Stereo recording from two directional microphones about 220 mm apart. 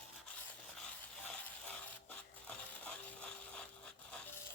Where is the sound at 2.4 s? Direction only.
5° left (ahead or behind).